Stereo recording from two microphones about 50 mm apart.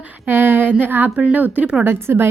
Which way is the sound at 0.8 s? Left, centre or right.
Right.